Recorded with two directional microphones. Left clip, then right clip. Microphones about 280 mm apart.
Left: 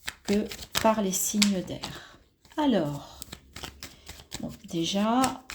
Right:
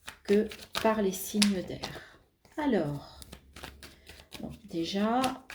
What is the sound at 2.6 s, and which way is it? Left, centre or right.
Speech, left.